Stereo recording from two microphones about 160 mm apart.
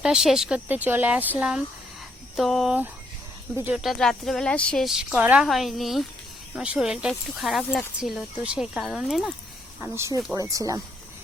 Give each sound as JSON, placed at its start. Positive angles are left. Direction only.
{"t": 0.0, "sound": "a woman's voice", "side_deg": -5}
{"t": 3.5, "sound": "speech", "side_deg": -15}
{"t": 3.8, "sound": "a woman's voice", "side_deg": 0}
{"t": 9.8, "sound": "speech", "side_deg": -15}